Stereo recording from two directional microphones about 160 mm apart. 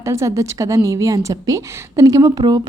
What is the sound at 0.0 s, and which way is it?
A woman's voice, 20° right (ahead or behind).